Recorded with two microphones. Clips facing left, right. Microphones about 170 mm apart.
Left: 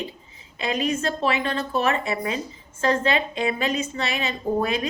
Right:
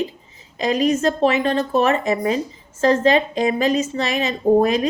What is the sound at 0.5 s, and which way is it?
A woman's voice, 35° right (ahead or behind).